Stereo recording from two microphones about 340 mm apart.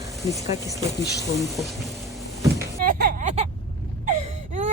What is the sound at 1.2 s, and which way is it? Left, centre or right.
Speech, centre.